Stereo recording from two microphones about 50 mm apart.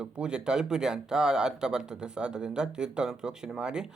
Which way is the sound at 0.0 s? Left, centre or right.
Centre.